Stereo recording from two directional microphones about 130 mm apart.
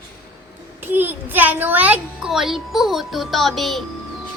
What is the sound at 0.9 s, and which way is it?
A child's voice, 15° right (ahead or behind).